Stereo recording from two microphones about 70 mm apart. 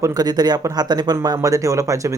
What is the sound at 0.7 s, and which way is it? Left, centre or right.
Speech, right.